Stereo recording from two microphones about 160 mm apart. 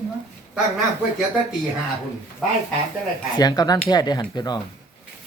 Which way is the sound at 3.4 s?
25° left (ahead or behind).